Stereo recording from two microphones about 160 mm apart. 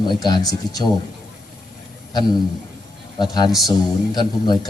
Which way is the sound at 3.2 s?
25° left (ahead or behind).